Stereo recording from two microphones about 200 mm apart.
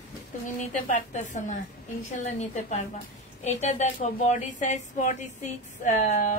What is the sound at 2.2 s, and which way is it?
A woman's voice, 35° left (ahead or behind).